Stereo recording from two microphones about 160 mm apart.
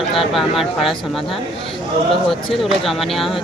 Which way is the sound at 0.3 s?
Centre (ahead or behind).